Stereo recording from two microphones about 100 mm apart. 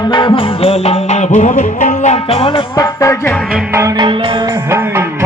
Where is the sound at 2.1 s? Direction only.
80° left.